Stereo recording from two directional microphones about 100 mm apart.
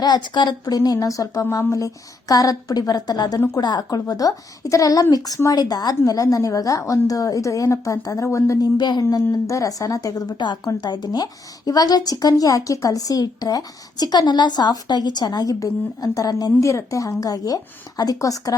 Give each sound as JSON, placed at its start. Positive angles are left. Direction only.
{"t": 0.0, "sound": "a woman's voice", "side_deg": 45}
{"t": 8.8, "sound": "a woman's voice", "side_deg": 40}